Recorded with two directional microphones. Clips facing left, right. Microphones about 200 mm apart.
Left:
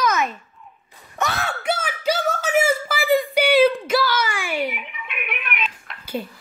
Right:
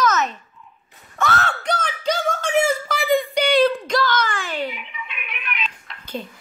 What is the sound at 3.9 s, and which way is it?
Speech, 10° left (ahead or behind).